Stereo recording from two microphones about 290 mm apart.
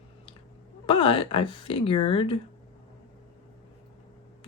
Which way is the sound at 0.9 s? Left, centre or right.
Centre.